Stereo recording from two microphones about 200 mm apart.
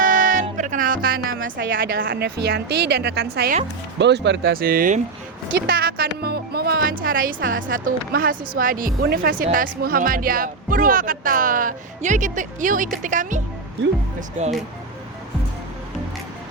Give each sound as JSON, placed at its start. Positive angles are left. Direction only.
{"t": 0.0, "sound": "music", "side_deg": -40}
{"t": 1.3, "sound": "a woman's voice", "side_deg": -75}
{"t": 2.0, "sound": "speech", "side_deg": -55}
{"t": 5.6, "sound": "music", "side_deg": -50}
{"t": 7.0, "sound": "speech", "side_deg": -45}